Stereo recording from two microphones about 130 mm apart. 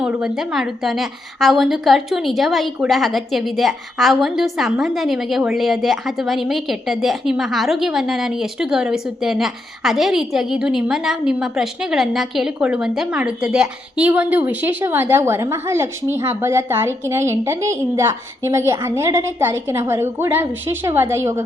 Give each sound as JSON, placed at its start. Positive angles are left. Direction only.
{"t": 0.0, "sound": "a woman's voice", "side_deg": -5}